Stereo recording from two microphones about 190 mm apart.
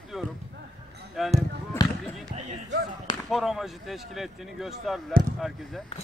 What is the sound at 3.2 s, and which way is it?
Speech, centre (ahead or behind).